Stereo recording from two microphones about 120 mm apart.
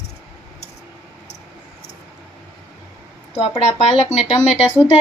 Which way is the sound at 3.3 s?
65° left (ahead or behind).